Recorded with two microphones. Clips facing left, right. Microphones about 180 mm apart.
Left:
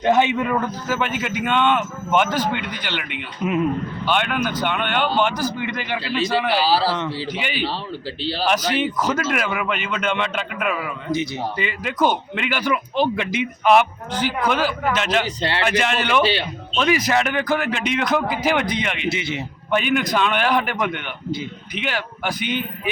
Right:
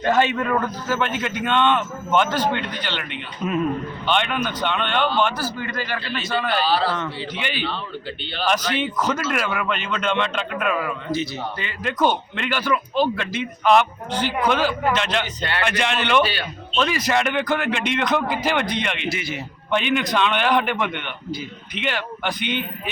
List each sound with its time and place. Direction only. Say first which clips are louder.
0.0 s speech: left 2 dB; 20° left (ahead or behind)
6.3 s speech: left 1 dB; 5° left (ahead or behind)
6.7 s speech: left 1 dB; 35° left (ahead or behind)
7.3 s speech: left 1 dB; 10° left (ahead or behind)
8.2 s speech: left 8 dB; 35° left (ahead or behind)
8.4 s speech: left 1 dB; 10° left (ahead or behind)
15.4 s speech: left 3 dB; 30° left (ahead or behind)
15.6 s speech: left 1 dB; 5° left (ahead or behind)
16.2 s speech: left 5 dB; 25° left (ahead or behind)
16.7 s speech: left 2 dB; 10° left (ahead or behind)
19.1 s speech: left 3 dB; 25° left (ahead or behind)
19.7 s speech: left 1 dB; 10° left (ahead or behind)